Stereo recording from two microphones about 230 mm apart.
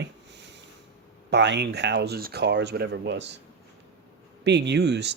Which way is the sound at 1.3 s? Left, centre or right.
Right.